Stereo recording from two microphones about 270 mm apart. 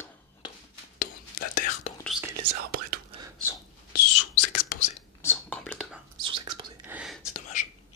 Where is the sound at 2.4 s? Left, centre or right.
Right.